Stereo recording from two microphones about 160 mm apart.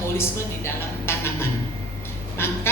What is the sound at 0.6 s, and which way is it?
A woman's voice, 15° left (ahead or behind).